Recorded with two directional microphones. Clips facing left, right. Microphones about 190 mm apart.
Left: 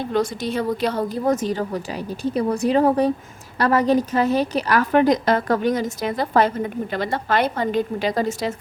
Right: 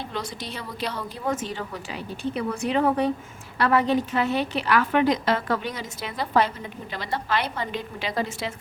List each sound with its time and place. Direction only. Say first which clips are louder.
0.0 s a woman's voice: left 10 dB; 50° left (ahead or behind)